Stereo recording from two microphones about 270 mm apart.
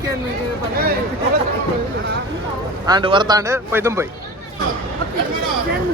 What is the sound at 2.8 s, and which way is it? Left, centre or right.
Speech, centre.